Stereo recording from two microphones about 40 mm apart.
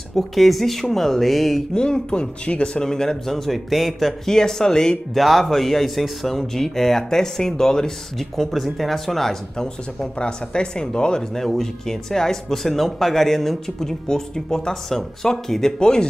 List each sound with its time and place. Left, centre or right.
0.1 s speech: centre
1.7 s speech: left; by 4.1 s centre
4.3 s speech: centre
5.1 s speech: centre
8.2 s speech: centre
10.1 s speech: left
11.3 s speech: centre